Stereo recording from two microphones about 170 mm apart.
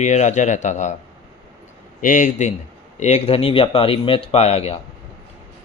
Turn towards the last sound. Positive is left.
turn(degrees=35)  # may be behind; listen again after turning